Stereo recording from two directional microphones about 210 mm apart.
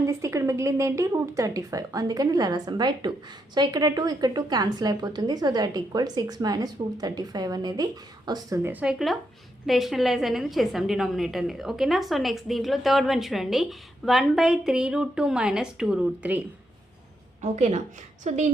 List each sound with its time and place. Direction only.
0.0 s a woman's voice: 15° right (ahead or behind)
17.4 s a woman's voice: 30° right (ahead or behind)